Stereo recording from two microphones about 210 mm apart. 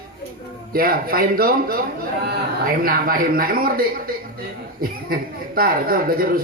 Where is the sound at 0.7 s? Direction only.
45° right (ahead or behind).